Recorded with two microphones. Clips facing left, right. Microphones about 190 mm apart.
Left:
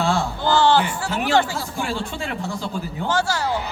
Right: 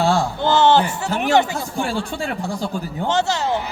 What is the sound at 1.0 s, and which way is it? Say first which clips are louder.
Speech: right 2 dB; 20° right (ahead or behind).